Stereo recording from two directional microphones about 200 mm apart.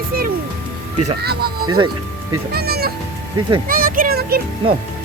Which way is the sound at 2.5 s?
50° right (ahead or behind).